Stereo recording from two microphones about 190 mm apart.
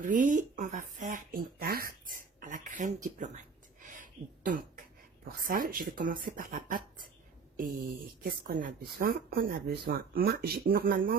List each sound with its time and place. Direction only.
0.0 s a sound: 45° right (ahead or behind)
3.8 s throat clearing: 45° right (ahead or behind)
7.5 s speech: 50° right (ahead or behind)